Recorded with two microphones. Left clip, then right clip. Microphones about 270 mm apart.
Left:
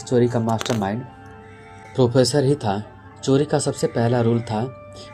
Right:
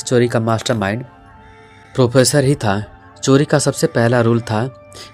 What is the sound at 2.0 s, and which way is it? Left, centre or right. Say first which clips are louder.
Speech: right 4 dB; right.